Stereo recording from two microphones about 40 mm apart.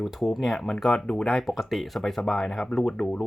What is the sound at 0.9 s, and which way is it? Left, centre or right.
Speech, left.